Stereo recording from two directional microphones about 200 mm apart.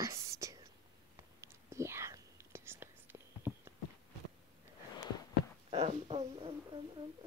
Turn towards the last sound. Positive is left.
turn(degrees=-30)  # may be behind; listen again after turning